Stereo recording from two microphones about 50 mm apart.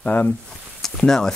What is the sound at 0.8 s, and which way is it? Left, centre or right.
Speech, centre.